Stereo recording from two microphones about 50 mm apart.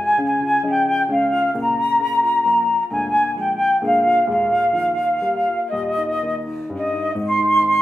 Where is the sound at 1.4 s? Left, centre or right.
Centre.